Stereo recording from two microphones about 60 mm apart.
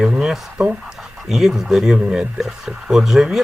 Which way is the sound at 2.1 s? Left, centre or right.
Centre.